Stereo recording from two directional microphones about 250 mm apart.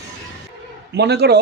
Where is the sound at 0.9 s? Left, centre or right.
Right.